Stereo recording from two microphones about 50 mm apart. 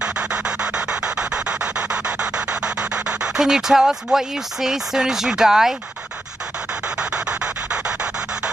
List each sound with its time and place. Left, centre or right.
0.0 s rub: right
3.3 s speech: centre
7.0 s a sound: right